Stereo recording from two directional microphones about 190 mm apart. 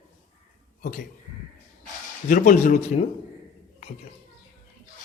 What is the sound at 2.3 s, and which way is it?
Speech, 45° left (ahead or behind).